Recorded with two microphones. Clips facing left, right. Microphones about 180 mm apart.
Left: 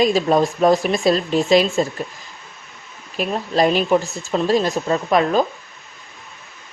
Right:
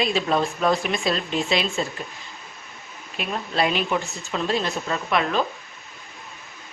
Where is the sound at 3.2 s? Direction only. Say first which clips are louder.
Left 6 dB; 40° left (ahead or behind).